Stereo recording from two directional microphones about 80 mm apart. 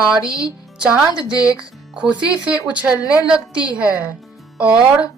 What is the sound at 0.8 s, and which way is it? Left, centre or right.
Speech, centre.